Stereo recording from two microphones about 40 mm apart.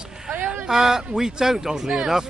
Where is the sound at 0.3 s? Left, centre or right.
Right.